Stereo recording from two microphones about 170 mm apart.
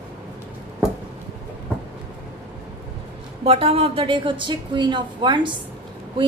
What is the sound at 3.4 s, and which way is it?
A woman's voice, 35° right (ahead or behind).